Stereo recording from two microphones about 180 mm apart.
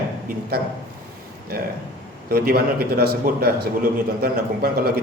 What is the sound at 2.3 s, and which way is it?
A man's voice, 60° right (ahead or behind).